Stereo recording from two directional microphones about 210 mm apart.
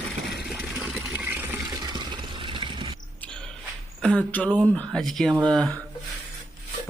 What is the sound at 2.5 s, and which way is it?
Mechanisms, 20° right (ahead or behind).